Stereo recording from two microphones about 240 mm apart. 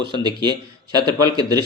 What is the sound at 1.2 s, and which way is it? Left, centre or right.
Speech, centre.